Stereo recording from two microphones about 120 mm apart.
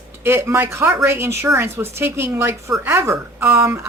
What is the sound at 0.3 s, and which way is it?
A woman's voice, 20° right (ahead or behind).